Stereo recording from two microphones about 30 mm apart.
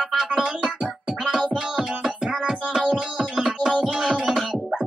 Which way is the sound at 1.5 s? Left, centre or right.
Right.